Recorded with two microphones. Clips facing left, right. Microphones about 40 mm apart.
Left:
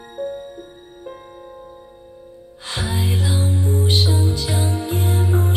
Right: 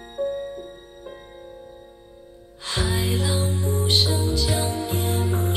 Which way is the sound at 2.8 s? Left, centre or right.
Left.